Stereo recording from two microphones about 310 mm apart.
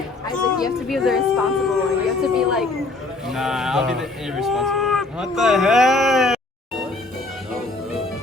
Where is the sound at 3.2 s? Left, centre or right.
Centre.